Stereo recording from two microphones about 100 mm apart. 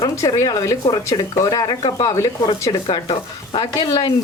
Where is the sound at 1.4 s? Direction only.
40° left (ahead or behind).